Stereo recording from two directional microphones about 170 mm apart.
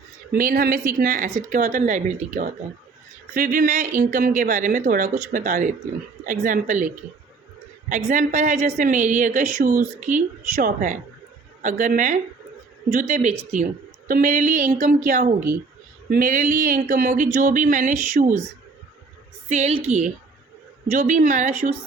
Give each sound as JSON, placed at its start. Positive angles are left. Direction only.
{"t": 0.3, "sound": "a woman's voice", "side_deg": -60}
{"t": 19.5, "sound": "a woman's voice", "side_deg": -40}